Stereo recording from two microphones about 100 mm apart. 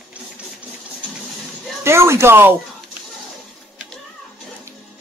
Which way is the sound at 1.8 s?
25° right (ahead or behind).